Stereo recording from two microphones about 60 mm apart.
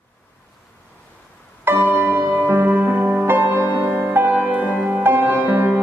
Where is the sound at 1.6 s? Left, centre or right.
Right.